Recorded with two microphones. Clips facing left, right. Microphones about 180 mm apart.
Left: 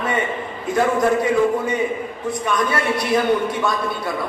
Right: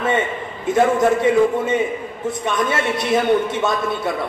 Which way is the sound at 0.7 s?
25° right (ahead or behind).